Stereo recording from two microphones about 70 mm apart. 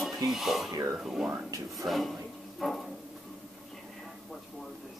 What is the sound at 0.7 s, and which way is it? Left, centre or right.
Speech, right.